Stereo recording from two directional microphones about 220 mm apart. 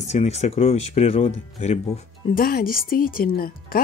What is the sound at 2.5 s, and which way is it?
Speech, 45° left (ahead or behind).